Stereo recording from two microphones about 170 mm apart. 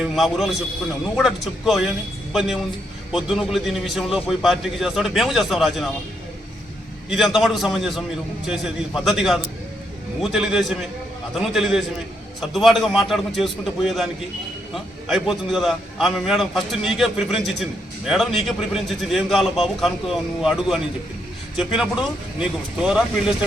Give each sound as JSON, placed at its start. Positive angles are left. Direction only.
{"t": 0.0, "sound": "a man's voice", "side_deg": 0}
{"t": 7.3, "sound": "a man's voice", "side_deg": 0}